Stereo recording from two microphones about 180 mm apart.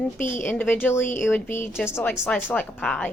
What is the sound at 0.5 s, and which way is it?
Speech, 10° left (ahead or behind).